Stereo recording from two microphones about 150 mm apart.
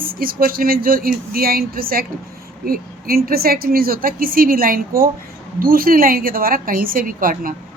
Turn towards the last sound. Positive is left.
turn(degrees=-70)  # may be behind; listen again after turning